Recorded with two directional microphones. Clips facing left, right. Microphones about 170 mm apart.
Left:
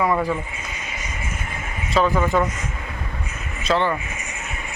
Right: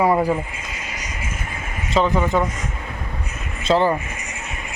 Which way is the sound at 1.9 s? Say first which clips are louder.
Right 1 dB; 20° right (ahead or behind).